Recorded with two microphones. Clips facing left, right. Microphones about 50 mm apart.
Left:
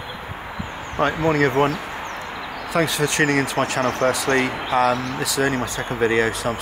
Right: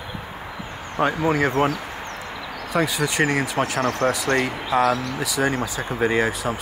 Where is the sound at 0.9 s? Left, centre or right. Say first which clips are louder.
Left 1 dB; centre.